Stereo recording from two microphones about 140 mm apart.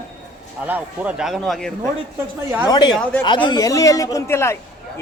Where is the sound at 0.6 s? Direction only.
10° right (ahead or behind).